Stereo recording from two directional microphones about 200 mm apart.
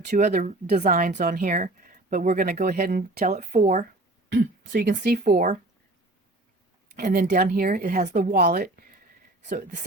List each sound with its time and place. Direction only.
0.0 s speech: 35° right (ahead or behind)
3.2 s speech: 35° right (ahead or behind)
4.4 s speech: 50° right (ahead or behind)
6.9 s speech: 45° right (ahead or behind)